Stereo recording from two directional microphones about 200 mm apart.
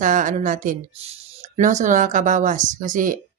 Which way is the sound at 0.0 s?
40° right (ahead or behind).